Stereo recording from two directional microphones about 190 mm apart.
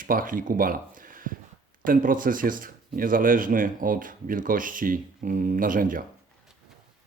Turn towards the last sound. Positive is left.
turn(degrees=-45)  # may be behind; listen again after turning